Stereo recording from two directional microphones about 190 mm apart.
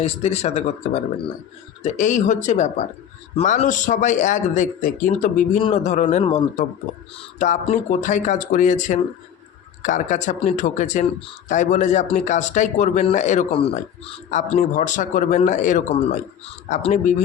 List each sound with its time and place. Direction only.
0.0 s a man's voice: 35° left (ahead or behind)